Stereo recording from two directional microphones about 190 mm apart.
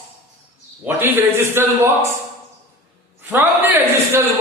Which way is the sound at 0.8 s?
10° right (ahead or behind).